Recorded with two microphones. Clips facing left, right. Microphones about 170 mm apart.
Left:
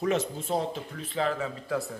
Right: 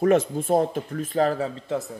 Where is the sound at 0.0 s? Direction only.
50° right (ahead or behind).